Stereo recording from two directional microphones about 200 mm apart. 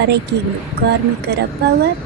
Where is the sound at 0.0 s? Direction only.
55° right (ahead or behind).